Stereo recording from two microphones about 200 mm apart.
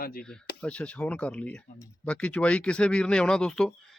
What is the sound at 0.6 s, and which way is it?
Speech, 5° left (ahead or behind).